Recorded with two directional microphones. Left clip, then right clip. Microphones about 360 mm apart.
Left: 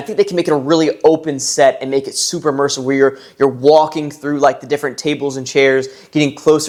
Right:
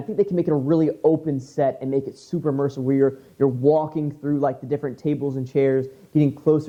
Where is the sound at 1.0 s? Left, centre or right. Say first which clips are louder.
Left 8 dB; centre.